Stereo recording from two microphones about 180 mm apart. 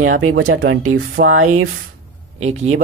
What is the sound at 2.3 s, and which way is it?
Speech, 35° right (ahead or behind).